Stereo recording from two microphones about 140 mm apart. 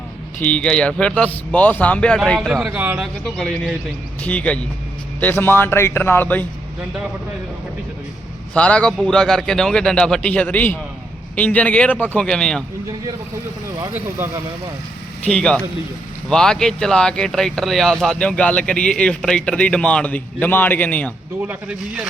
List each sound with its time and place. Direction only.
0.4 s speech: 5° left (ahead or behind)
2.7 s speech: 10° right (ahead or behind)
3.2 s speech: centre (ahead or behind)
8.5 s speech: 10° left (ahead or behind)
13.7 s speech: 20° right (ahead or behind)
15.2 s speech: 5° left (ahead or behind)
21.4 s speech: 10° right (ahead or behind)